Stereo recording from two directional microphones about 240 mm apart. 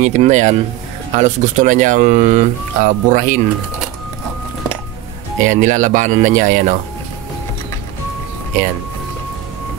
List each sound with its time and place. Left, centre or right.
0.0 s speech: right
5.4 s speech: right